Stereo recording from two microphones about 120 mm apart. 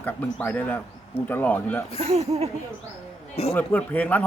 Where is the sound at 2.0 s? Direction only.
60° right (ahead or behind).